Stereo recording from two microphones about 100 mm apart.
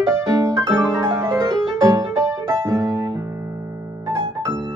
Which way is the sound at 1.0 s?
25° right (ahead or behind).